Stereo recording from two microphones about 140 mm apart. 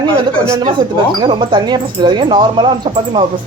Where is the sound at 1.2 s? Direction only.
35° right (ahead or behind).